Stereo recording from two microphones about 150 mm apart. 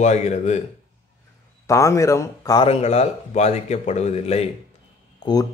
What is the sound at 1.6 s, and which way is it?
Speech, 20° left (ahead or behind).